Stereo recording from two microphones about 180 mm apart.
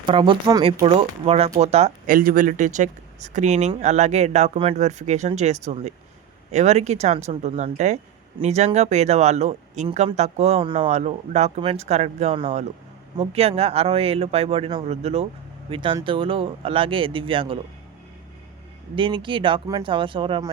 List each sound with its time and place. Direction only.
0.0 s speech: 30° right (ahead or behind)
2.0 s speech: 50° right (ahead or behind); by 17.6 s 30° right (ahead or behind)
18.9 s speech: 30° right (ahead or behind)